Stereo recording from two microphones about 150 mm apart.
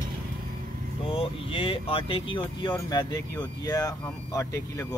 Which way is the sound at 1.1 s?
35° left (ahead or behind).